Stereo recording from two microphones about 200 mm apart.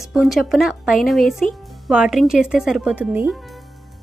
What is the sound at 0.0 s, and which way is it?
Speech, centre (ahead or behind).